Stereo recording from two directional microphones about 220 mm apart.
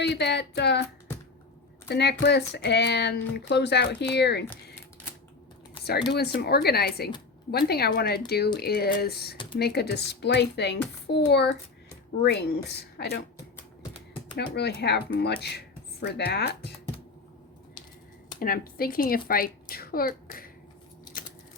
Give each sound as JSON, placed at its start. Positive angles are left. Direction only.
{"t": 0.0, "sound": "a sound", "side_deg": 50}
{"t": 1.9, "sound": "speech", "side_deg": 50}
{"t": 6.1, "sound": "speech", "side_deg": 45}
{"t": 14.3, "sound": "speech", "side_deg": 50}
{"t": 18.3, "sound": "a child's voice", "side_deg": 40}